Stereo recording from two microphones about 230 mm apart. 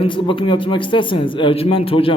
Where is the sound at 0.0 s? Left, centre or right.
Left.